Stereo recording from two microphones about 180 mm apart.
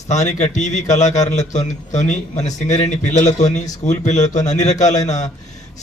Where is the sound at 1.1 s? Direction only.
20° left (ahead or behind).